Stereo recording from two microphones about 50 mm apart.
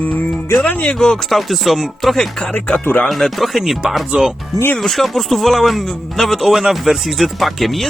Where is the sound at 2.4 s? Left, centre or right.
Left.